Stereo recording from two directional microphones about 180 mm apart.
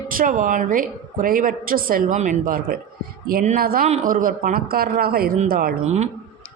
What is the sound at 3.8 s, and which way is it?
A woman's voice, 45° right (ahead or behind).